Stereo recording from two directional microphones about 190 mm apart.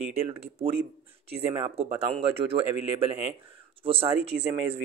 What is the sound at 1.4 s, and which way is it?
Speech, 35° right (ahead or behind).